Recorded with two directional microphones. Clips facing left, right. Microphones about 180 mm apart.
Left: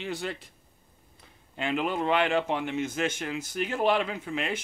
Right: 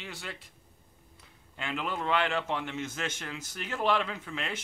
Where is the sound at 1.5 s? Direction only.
20° left (ahead or behind).